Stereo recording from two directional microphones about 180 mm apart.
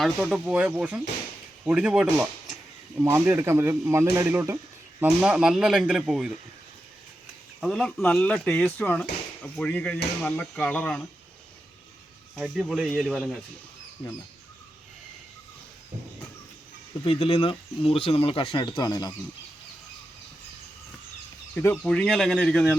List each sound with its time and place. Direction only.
0.2 s speech: 5° right (ahead or behind)
7.6 s speech: 5° left (ahead or behind)
12.4 s speech: 5° right (ahead or behind)
17.0 s speech: 30° left (ahead or behind)
21.5 s speech: 10° left (ahead or behind)